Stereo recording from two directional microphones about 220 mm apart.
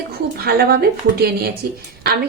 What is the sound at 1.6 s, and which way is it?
Speech, 40° right (ahead or behind).